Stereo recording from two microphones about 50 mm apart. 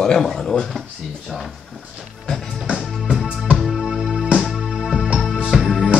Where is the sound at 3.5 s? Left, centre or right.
Centre.